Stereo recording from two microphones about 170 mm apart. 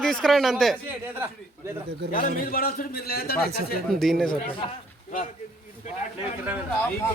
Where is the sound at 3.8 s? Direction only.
Centre (ahead or behind).